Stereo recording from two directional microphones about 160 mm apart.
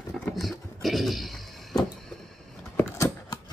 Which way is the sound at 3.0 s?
20° left (ahead or behind).